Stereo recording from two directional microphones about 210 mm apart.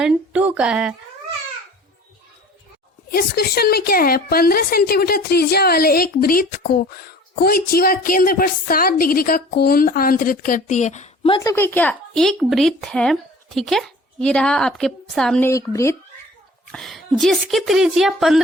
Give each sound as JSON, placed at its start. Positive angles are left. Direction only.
{"t": 0.0, "sound": "a woman's voice", "side_deg": -5}
{"t": 3.1, "sound": "a woman's voice", "side_deg": 45}
{"t": 15.4, "sound": "speech", "side_deg": 15}
{"t": 16.7, "sound": "a woman's voice", "side_deg": 0}